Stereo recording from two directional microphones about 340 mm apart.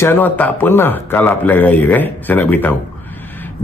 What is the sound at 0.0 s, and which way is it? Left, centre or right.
A man's voice, centre.